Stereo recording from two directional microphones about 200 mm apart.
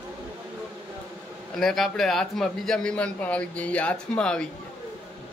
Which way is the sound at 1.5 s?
Centre (ahead or behind).